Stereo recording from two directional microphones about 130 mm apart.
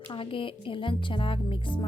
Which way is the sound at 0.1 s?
40° left (ahead or behind).